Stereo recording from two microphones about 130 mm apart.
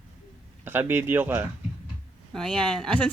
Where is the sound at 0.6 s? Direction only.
15° right (ahead or behind).